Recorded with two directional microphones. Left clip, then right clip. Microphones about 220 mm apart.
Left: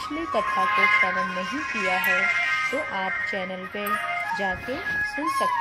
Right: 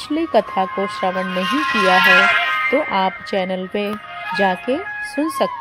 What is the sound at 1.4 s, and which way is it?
Speech, 40° right (ahead or behind).